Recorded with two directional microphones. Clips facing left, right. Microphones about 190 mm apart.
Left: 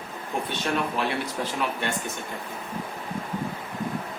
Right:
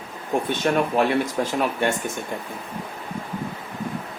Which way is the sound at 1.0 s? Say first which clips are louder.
Right 7 dB; 45° right (ahead or behind).